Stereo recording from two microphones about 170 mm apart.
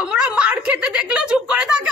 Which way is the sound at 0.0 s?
5° right (ahead or behind).